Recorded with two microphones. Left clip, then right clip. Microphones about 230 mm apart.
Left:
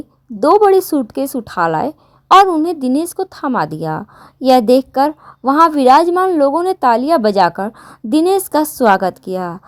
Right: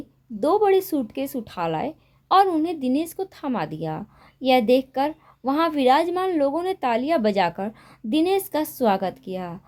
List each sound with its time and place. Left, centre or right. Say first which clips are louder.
0.4 s a woman's voice: left 9 dB; left